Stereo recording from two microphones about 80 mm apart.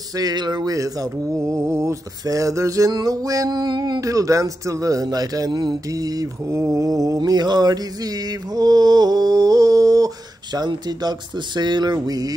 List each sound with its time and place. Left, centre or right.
0.1 s mantra: right
0.7 s speech: right
1.4 s mantra: right
2.2 s speech: right
2.9 s speech: right
6.5 s mantra: right
7.2 s mantra: right